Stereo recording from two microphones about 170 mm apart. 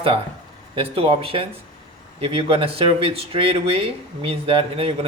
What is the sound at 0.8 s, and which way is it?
Speech, 35° right (ahead or behind).